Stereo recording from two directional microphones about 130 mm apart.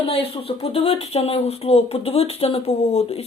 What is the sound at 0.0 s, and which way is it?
Speech, 50° left (ahead or behind).